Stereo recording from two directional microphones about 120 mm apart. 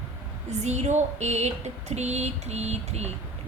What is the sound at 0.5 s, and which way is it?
A woman's voice, 70° right (ahead or behind).